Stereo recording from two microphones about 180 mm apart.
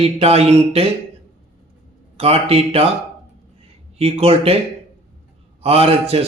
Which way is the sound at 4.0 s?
35° right (ahead or behind).